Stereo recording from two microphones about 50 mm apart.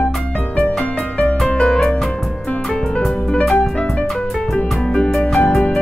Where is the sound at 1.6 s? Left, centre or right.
Centre.